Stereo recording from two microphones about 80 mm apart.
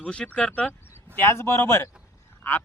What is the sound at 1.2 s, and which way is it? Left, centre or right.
Speech, left.